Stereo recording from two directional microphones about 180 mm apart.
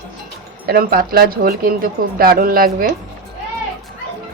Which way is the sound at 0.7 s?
55° right (ahead or behind).